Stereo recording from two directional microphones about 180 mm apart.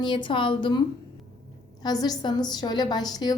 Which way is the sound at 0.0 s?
25° left (ahead or behind).